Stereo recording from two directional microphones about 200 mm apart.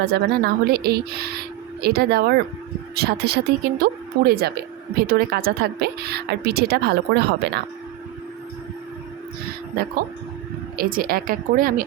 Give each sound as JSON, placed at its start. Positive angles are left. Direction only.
{"t": 0.0, "sound": "a woman's voice", "side_deg": -55}
{"t": 10.8, "sound": "a woman's voice", "side_deg": -45}